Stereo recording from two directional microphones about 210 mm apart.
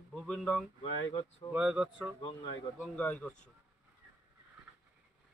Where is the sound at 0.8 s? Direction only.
25° left (ahead or behind).